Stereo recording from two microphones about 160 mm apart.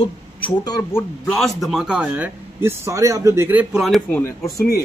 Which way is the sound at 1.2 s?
5° left (ahead or behind).